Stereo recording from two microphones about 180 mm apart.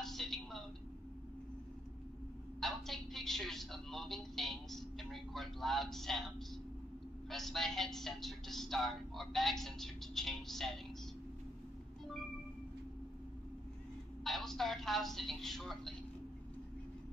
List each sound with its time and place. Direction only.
0.0 s a sound: centre (ahead or behind)
2.6 s music: centre (ahead or behind)
7.2 s speech: centre (ahead or behind)
14.2 s speech: centre (ahead or behind)